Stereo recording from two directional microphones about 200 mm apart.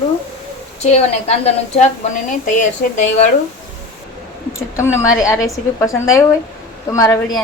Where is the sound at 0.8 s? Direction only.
35° left (ahead or behind).